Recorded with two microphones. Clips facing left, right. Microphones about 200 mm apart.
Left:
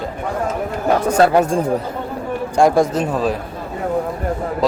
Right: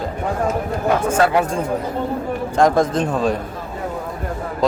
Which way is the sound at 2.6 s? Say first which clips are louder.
Left 2 dB; 10° left (ahead or behind).